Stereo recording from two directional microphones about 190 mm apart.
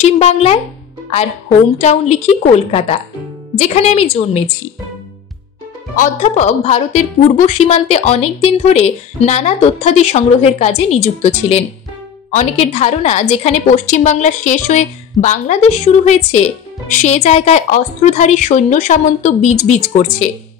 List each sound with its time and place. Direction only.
0.0 s a sound: 35° left (ahead or behind)
1.8 s a woman's voice: 35° left (ahead or behind)
5.9 s a woman's voice: 40° left (ahead or behind)